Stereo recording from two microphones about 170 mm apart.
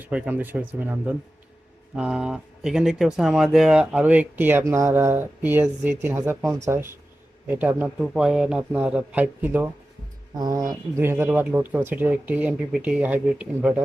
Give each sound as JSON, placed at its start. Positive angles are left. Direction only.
{"t": 0.0, "sound": "speech", "side_deg": -10}
{"t": 10.3, "sound": "speech", "side_deg": -20}